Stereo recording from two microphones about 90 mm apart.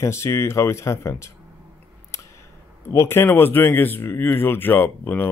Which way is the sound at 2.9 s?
30° left (ahead or behind).